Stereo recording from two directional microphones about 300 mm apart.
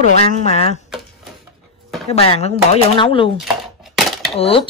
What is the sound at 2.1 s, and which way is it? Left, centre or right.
Speech, centre.